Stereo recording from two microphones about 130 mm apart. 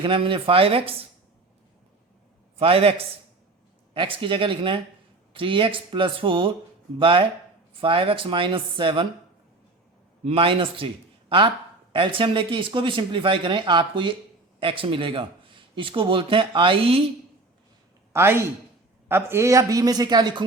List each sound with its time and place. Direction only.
0.0 s speech: 40° right (ahead or behind)
2.6 s speech: 45° right (ahead or behind)
3.9 s speech: 40° right (ahead or behind)
10.2 s speech: 45° right (ahead or behind)
18.1 s speech: 20° right (ahead or behind)